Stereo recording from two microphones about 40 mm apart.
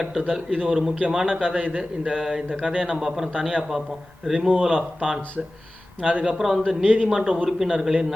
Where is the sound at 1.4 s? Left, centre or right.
Right.